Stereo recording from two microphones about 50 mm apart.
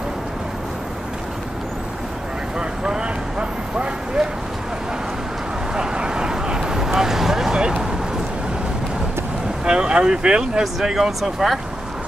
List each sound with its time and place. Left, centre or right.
2.8 s vehicle: centre
5.8 s vehicle: centre
9.7 s speech: centre
10.6 s speech: centre